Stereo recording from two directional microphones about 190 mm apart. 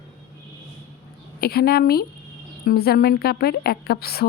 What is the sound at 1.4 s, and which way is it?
A woman's voice, 55° left (ahead or behind).